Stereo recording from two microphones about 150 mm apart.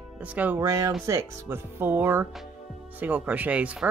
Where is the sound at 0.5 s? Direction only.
20° right (ahead or behind).